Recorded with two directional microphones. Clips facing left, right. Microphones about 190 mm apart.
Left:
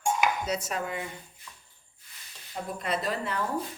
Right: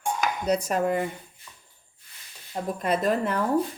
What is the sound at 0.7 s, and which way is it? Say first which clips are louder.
Speech: right 9 dB; 50° right (ahead or behind).